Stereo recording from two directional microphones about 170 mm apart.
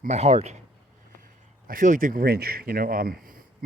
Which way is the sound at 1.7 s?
55° right (ahead or behind).